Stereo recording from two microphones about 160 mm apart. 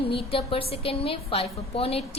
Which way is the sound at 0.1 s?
35° left (ahead or behind).